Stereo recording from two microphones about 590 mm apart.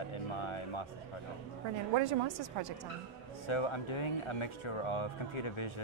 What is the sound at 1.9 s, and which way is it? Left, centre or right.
Speech, right.